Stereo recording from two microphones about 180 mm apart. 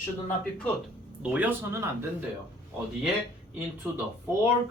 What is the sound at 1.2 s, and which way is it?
Speech, 5° right (ahead or behind).